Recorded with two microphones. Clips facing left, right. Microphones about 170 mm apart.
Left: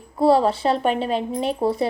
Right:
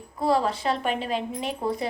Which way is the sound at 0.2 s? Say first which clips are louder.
Left 7 dB; 30° left (ahead or behind).